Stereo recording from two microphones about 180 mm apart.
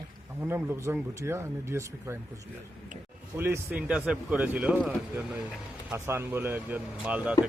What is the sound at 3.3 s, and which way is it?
Speech, 10° right (ahead or behind).